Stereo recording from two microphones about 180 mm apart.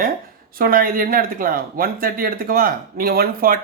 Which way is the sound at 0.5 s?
55° right (ahead or behind).